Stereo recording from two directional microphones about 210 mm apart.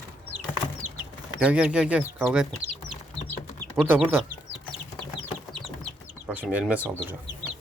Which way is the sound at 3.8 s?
10° right (ahead or behind).